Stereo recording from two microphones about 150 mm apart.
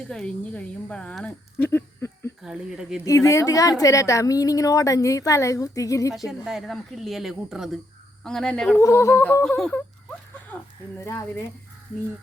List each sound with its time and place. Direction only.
0.0 s a woman's voice: 5° left (ahead or behind)
2.4 s speech: 5° right (ahead or behind)
3.0 s a woman's voice: 20° left (ahead or behind)
6.4 s speech: centre (ahead or behind)
8.8 s a woman's voice: 20° left (ahead or behind)
9.4 s speech: 5° left (ahead or behind)
11.0 s a woman's voice: 20° left (ahead or behind)